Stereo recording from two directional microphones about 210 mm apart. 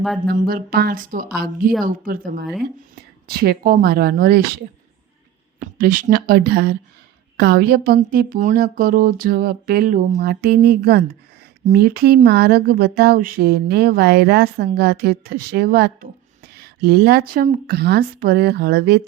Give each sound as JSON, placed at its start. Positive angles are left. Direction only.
{"t": 0.3, "sound": "a woman's voice", "side_deg": -45}